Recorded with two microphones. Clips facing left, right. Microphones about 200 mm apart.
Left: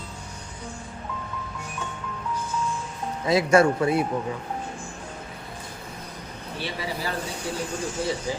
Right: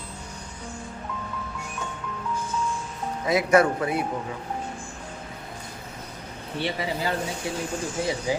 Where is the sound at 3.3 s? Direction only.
30° left (ahead or behind).